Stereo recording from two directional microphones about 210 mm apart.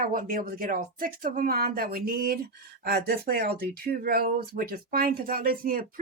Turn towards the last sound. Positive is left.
turn(degrees=-45)  # may be behind; listen again after turning